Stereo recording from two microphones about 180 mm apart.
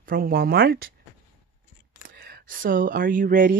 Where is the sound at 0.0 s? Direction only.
55° right (ahead or behind).